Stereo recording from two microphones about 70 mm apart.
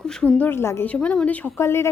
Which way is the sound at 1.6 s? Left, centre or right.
Left.